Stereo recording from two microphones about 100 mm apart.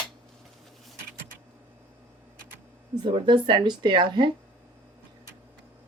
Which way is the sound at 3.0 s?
55° right (ahead or behind).